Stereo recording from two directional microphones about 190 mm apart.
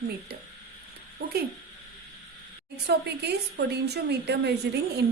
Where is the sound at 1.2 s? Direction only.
60° right (ahead or behind).